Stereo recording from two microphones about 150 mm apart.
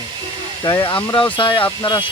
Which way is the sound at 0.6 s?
30° left (ahead or behind).